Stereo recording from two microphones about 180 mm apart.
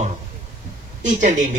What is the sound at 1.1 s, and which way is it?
Speech, 45° right (ahead or behind).